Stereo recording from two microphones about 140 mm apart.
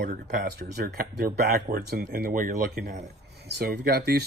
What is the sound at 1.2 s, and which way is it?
Speech, 90° right.